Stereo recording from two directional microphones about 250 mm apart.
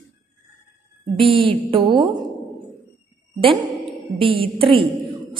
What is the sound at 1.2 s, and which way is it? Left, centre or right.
Speech, right.